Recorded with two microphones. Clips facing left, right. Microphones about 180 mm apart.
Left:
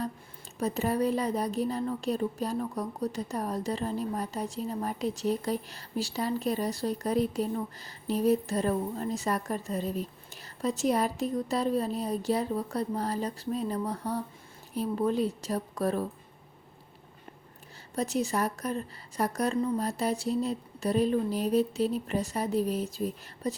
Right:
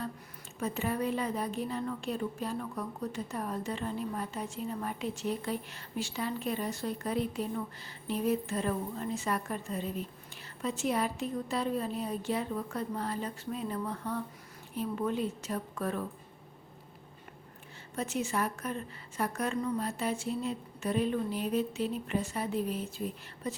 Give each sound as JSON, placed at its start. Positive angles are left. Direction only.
{"t": 0.6, "sound": "speech", "side_deg": 40}
{"t": 17.9, "sound": "speech", "side_deg": 40}